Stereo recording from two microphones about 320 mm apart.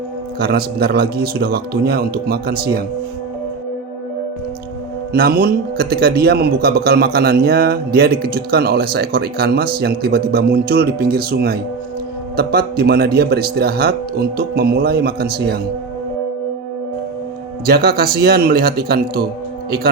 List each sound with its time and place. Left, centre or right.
0.3 s a man's voice: right
5.1 s a man's voice: right
17.7 s a man's voice: right